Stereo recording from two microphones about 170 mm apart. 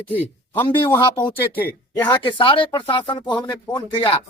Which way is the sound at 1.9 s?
25° left (ahead or behind).